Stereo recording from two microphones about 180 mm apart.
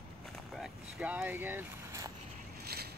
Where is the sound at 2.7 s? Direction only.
60° right (ahead or behind).